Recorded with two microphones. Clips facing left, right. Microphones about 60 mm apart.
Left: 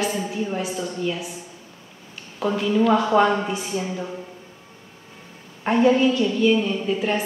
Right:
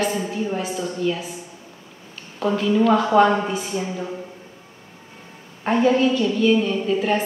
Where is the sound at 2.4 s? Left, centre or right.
Centre.